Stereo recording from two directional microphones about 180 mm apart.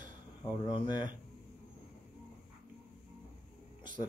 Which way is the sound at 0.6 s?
25° left (ahead or behind).